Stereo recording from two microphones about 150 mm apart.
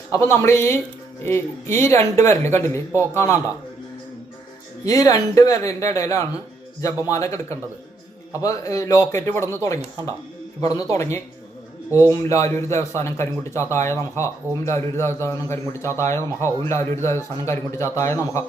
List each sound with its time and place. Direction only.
0.1 s speech: 20° left (ahead or behind)
4.9 s a man's voice: 25° left (ahead or behind)
10.6 s a man's voice: 25° left (ahead or behind)